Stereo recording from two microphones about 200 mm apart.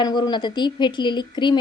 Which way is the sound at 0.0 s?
20° left (ahead or behind).